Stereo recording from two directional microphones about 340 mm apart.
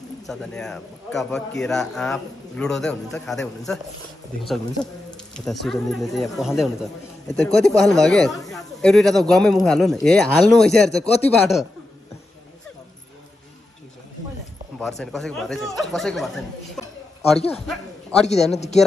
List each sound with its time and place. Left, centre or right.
0.3 s speech: centre
14.8 s speech: centre
17.5 s speech: centre
18.3 s speech: centre